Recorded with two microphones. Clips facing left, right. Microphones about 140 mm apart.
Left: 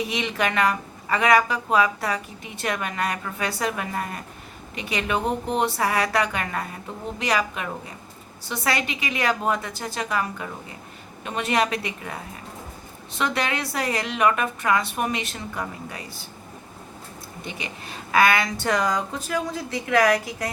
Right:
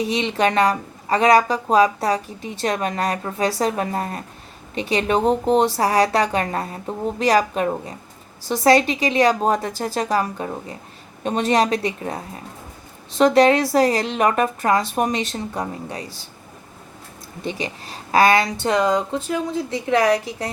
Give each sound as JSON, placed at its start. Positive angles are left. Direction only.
{"t": 0.0, "sound": "speech", "side_deg": -30}
{"t": 17.4, "sound": "a woman's voice", "side_deg": -35}